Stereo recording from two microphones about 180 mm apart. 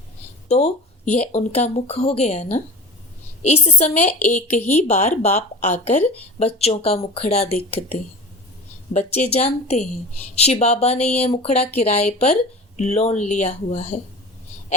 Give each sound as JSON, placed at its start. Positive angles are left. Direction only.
{"t": 0.4, "sound": "a woman's voice", "side_deg": 40}